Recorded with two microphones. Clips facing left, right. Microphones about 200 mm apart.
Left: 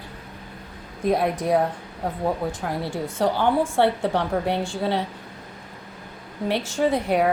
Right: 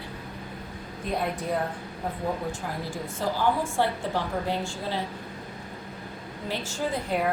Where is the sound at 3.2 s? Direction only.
65° left (ahead or behind).